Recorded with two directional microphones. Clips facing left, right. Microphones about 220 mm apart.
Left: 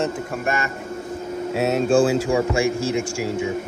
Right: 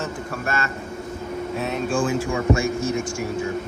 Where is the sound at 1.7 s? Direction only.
40° left (ahead or behind).